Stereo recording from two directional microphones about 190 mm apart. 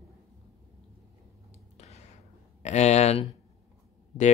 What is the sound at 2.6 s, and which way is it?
Speech, 35° left (ahead or behind).